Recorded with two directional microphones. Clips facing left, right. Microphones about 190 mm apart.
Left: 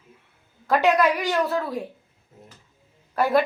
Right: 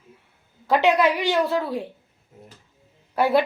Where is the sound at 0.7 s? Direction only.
25° right (ahead or behind).